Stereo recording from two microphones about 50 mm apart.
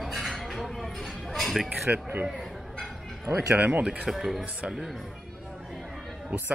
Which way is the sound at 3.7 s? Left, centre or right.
Right.